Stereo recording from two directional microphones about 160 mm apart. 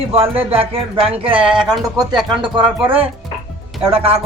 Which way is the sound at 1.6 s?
Centre (ahead or behind).